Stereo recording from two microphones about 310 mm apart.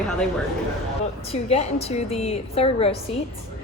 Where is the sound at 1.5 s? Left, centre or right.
Centre.